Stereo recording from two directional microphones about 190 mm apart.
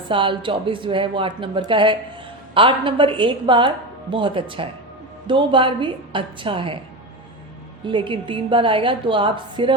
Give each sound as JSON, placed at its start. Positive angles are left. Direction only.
{"t": 0.1, "sound": "a woman's voice", "side_deg": -25}
{"t": 7.9, "sound": "a woman's voice", "side_deg": -25}